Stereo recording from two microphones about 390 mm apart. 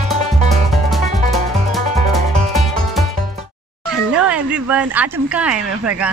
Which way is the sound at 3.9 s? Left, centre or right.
Centre.